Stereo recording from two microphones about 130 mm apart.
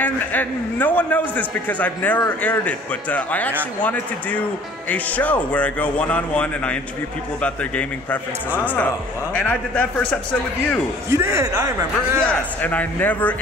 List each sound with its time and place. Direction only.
0.0 s a man's voice: 15° left (ahead or behind)
11.1 s a man's voice: 25° right (ahead or behind)
12.2 s a man's voice: 10° left (ahead or behind)